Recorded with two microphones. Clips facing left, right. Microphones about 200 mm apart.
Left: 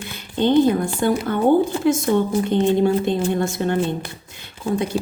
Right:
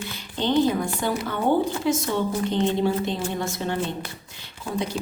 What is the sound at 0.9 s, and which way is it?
Speech, 50° left (ahead or behind).